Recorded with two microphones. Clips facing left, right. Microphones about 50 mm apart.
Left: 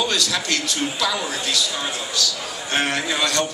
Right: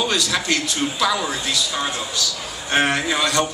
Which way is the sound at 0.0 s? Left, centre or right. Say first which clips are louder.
Right 1 dB; centre.